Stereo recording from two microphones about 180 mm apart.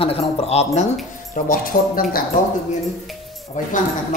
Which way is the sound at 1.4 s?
50° left (ahead or behind).